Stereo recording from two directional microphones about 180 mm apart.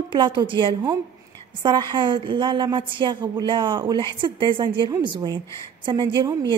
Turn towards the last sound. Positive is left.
turn(degrees=-25)  # may be behind; listen again after turning